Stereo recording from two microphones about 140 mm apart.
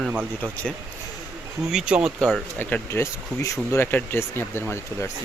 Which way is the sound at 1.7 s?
5° right (ahead or behind).